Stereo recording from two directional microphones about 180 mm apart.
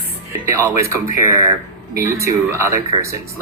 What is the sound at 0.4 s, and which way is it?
Speech, 15° right (ahead or behind).